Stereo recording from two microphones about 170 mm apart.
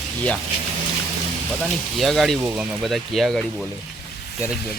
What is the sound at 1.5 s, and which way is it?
Speech, centre (ahead or behind).